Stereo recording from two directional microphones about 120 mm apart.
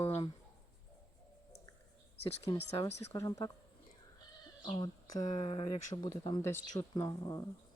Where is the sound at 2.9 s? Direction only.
25° left (ahead or behind).